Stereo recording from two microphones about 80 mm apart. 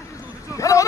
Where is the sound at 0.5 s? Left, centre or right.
Left.